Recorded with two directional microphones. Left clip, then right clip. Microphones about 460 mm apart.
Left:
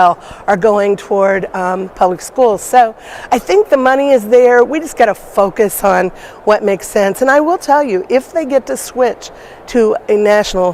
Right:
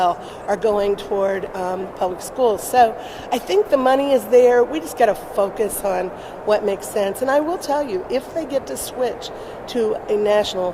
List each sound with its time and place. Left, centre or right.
0.0 s speech: left